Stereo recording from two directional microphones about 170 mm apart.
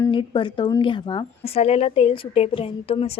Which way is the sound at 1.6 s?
35° left (ahead or behind).